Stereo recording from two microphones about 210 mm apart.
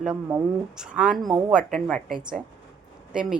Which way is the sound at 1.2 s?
15° right (ahead or behind).